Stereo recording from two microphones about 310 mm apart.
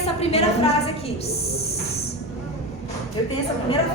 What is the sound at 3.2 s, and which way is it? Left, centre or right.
Speech, centre.